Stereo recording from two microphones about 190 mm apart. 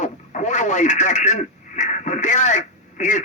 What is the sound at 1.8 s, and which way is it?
Radio, 40° left (ahead or behind).